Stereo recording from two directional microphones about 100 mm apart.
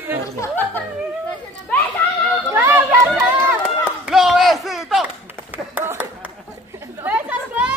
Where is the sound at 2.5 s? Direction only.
20° right (ahead or behind).